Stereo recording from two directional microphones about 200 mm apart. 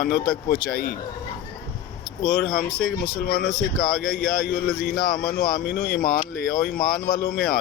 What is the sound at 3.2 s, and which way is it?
Speech, 50° left (ahead or behind).